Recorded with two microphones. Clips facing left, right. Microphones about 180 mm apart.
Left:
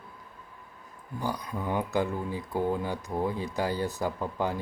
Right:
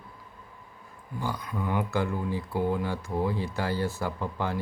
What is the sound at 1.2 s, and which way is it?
Speech, 20° left (ahead or behind).